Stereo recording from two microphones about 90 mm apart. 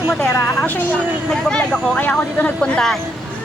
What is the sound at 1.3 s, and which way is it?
Speech, 10° left (ahead or behind).